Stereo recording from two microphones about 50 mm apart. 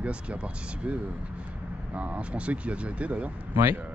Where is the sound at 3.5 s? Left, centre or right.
Right.